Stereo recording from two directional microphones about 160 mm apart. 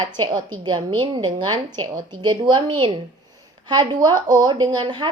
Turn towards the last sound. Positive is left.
turn(degrees=-25)  # may be behind; listen again after turning